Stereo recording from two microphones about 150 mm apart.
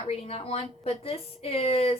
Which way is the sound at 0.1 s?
40° left (ahead or behind).